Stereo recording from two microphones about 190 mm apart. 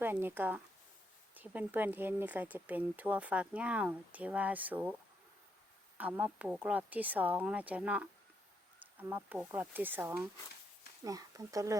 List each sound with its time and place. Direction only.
0.0 s speech: 10° right (ahead or behind)
6.0 s speech: 10° right (ahead or behind)